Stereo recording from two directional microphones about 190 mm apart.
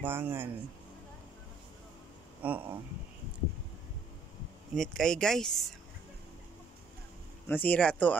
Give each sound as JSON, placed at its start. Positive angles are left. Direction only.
{"t": 0.0, "sound": "a man's voice", "side_deg": -10}
{"t": 2.4, "sound": "a man's voice", "side_deg": -10}
{"t": 4.7, "sound": "speech", "side_deg": 5}
{"t": 7.4, "sound": "speech", "side_deg": 10}